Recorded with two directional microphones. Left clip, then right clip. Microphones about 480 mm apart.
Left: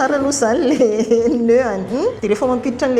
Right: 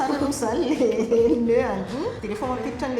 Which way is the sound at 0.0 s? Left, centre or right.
Left.